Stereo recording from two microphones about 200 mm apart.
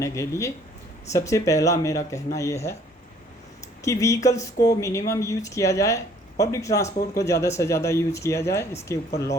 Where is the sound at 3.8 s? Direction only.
15° left (ahead or behind).